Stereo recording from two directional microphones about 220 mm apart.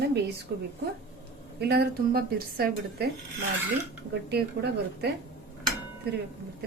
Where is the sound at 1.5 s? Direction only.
45° right (ahead or behind).